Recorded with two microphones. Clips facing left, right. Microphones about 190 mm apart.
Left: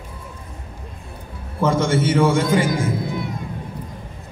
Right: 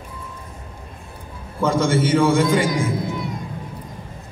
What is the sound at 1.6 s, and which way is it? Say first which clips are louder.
A man's voice: even; 25° left (ahead or behind).